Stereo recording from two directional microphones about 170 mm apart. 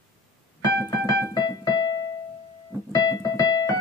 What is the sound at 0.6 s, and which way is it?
Keyboard, 20° left (ahead or behind).